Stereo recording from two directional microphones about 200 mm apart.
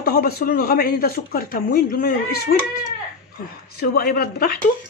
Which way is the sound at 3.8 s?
50° left (ahead or behind).